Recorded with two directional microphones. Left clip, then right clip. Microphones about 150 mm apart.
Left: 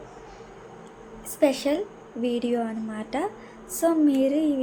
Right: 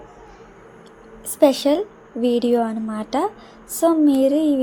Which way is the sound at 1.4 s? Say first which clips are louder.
Right 7 dB; 40° right (ahead or behind).